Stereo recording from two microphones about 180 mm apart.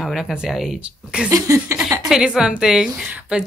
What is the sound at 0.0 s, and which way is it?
Speech, 5° right (ahead or behind).